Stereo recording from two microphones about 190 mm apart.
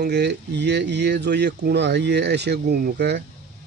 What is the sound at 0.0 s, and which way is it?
Speech, 60° right (ahead or behind).